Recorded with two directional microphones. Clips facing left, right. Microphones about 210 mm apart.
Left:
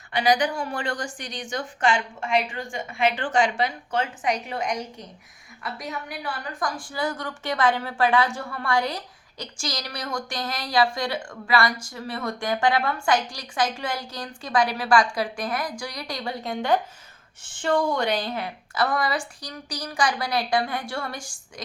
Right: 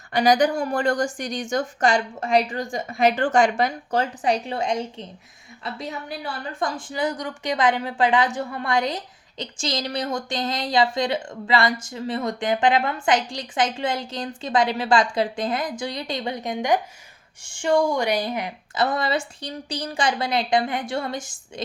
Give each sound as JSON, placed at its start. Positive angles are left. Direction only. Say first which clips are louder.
{"t": 0.1, "sound": "a woman's voice", "louder": "right 4 dB", "side_deg": -45}